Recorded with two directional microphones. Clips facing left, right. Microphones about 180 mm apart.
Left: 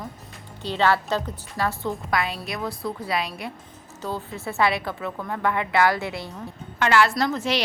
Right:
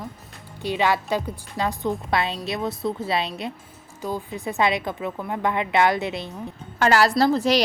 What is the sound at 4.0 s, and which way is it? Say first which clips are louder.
A woman's voice: right 2 dB; 10° right (ahead or behind).